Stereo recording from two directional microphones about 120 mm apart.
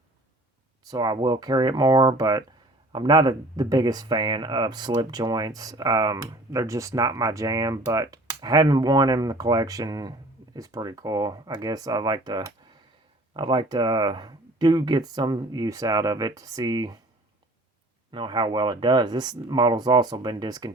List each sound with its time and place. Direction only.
0.9 s speech: 35° right (ahead or behind)
18.1 s speech: 40° right (ahead or behind)